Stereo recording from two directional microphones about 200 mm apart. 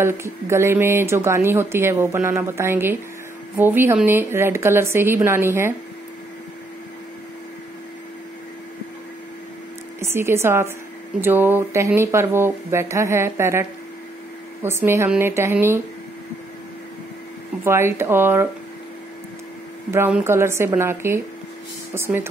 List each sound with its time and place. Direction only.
0.0 s speech: 15° right (ahead or behind)
9.9 s speech: 15° right (ahead or behind)
17.6 s speech: 10° right (ahead or behind)
19.9 s speech: 10° right (ahead or behind)